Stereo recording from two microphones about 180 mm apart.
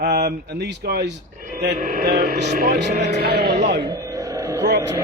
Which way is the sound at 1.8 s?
50° right (ahead or behind).